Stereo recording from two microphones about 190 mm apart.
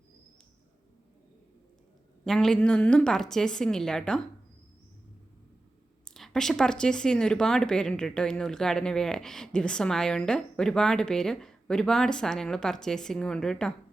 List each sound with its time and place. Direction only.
2.2 s speech: 5° left (ahead or behind)
6.1 s speech: centre (ahead or behind)